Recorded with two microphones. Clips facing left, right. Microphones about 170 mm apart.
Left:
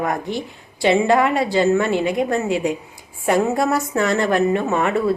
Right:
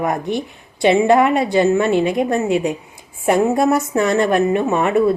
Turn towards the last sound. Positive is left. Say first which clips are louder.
# right 3 dB
turn(degrees=-20)  # may be behind; listen again after turning